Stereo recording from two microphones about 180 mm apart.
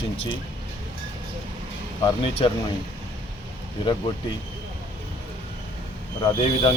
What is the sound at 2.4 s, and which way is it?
Speech, 30° left (ahead or behind).